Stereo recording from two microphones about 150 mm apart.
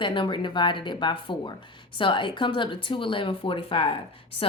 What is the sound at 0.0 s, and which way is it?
A woman's voice, 30° left (ahead or behind).